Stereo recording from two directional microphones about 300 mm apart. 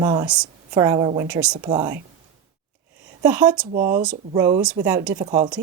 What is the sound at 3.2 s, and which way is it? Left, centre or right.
Speech, centre.